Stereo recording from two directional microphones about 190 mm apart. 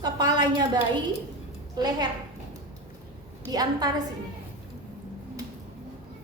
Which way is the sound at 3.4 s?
20° right (ahead or behind).